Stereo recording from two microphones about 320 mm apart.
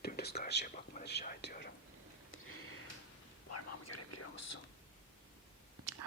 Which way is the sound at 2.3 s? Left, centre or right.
Left.